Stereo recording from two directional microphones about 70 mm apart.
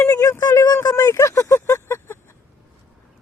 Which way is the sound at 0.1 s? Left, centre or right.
Left.